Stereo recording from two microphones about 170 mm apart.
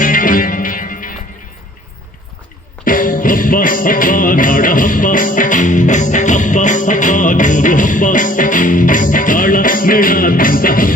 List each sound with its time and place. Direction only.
0.0 s music: 55° left (ahead or behind)
2.8 s music: 55° left (ahead or behind)